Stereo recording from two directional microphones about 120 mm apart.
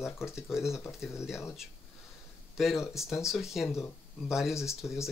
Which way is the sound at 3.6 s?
20° left (ahead or behind).